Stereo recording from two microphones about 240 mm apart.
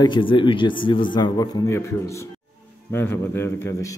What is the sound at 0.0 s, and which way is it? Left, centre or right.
A man's voice, centre.